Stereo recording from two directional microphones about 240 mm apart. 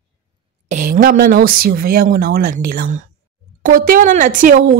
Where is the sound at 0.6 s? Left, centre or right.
Right.